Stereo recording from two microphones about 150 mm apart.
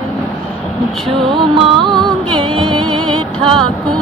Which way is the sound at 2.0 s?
35° right (ahead or behind).